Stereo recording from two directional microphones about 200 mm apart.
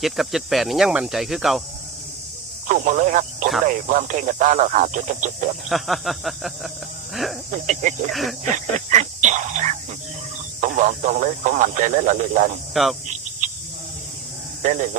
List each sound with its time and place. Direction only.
0.0 s speech: centre (ahead or behind)
2.6 s speech: 40° right (ahead or behind)
5.6 s speech: centre (ahead or behind)
7.5 s speech: 35° right (ahead or behind)
8.1 s speech: centre (ahead or behind)
8.9 s speech: 35° right (ahead or behind)
12.7 s speech: centre (ahead or behind)
14.6 s speech: 35° right (ahead or behind)